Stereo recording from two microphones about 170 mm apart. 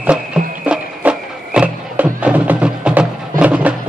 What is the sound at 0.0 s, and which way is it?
Music, 5° right (ahead or behind).